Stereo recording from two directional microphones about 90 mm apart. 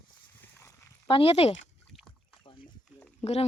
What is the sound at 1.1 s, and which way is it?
Speech, 90° left.